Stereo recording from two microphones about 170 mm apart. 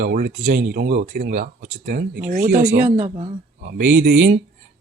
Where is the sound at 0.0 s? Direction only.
55° right (ahead or behind).